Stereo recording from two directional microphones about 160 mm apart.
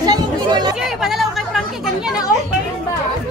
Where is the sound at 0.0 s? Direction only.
25° right (ahead or behind).